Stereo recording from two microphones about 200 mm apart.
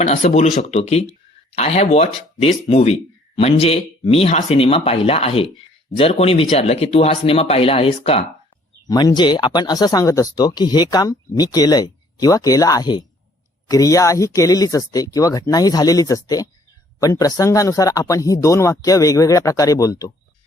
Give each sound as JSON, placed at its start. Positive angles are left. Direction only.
{"t": 0.0, "sound": "speech", "side_deg": 35}
{"t": 8.9, "sound": "speech", "side_deg": 20}